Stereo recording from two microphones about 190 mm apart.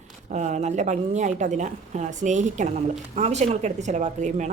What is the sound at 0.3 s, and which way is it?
Speech, 40° right (ahead or behind).